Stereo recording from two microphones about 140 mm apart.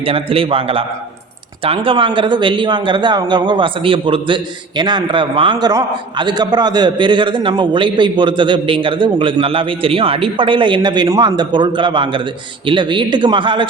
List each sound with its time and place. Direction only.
0.0 s a man's voice: 40° right (ahead or behind)